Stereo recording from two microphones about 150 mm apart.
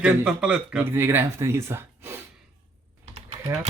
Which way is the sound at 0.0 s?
10° right (ahead or behind).